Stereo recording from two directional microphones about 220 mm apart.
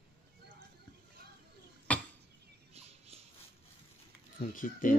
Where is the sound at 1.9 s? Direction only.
5° left (ahead or behind).